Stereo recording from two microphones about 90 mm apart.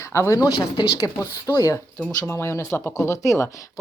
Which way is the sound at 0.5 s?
50° left (ahead or behind).